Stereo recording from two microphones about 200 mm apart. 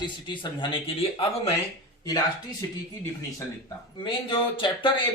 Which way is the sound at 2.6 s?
15° left (ahead or behind).